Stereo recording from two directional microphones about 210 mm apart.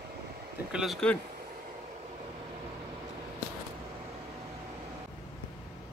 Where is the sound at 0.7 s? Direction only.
Centre (ahead or behind).